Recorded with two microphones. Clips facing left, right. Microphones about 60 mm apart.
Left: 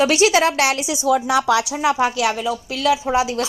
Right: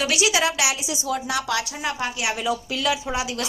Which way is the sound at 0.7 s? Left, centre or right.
Left.